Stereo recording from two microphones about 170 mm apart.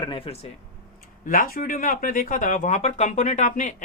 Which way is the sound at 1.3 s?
55° left (ahead or behind).